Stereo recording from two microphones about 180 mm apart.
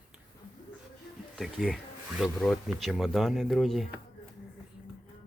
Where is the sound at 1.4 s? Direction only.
Centre (ahead or behind).